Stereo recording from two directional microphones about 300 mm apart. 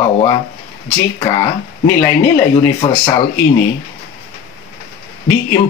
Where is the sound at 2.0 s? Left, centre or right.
Centre.